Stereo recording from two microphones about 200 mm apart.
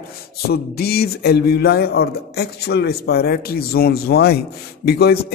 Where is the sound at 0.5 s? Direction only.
50° left (ahead or behind).